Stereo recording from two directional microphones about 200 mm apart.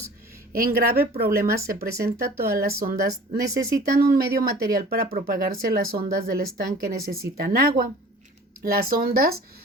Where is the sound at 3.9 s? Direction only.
45° right (ahead or behind).